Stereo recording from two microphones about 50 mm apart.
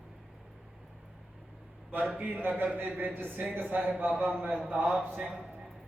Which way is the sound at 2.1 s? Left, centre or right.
Right.